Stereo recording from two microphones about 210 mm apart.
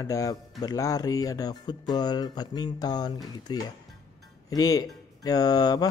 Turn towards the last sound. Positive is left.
turn(degrees=20)  # may be behind; listen again after turning